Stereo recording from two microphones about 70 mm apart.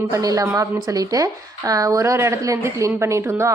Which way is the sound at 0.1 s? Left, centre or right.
Right.